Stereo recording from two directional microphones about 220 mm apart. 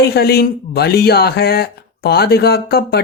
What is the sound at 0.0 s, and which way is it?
Speech, 45° left (ahead or behind).